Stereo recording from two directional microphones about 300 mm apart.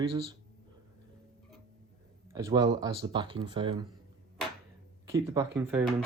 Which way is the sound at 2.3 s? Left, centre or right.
Centre.